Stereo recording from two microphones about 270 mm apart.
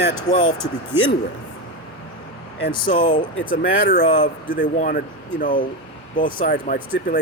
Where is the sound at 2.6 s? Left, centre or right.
Left.